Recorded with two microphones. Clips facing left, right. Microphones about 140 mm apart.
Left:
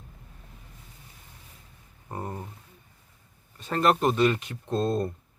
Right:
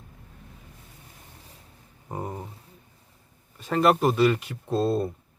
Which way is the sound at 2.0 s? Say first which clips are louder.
Right 2 dB; 10° right (ahead or behind).